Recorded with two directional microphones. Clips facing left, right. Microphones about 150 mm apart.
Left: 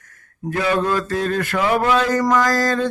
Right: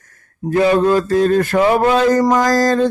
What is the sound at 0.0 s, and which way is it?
Mantra, 35° right (ahead or behind).